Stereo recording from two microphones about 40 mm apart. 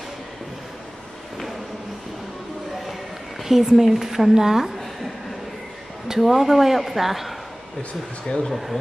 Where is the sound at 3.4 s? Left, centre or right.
Centre.